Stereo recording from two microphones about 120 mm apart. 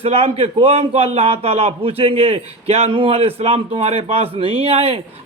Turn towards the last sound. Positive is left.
turn(degrees=-55)  # may be behind; listen again after turning